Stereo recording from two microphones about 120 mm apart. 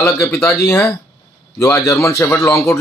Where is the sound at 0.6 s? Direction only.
20° left (ahead or behind).